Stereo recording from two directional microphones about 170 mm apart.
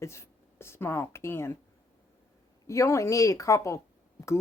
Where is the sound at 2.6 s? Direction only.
20° left (ahead or behind).